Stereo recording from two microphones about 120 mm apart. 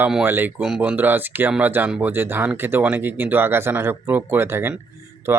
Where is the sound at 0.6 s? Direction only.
5° right (ahead or behind).